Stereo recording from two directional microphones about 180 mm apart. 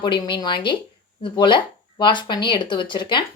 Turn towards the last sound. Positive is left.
turn(degrees=25)  # may be behind; listen again after turning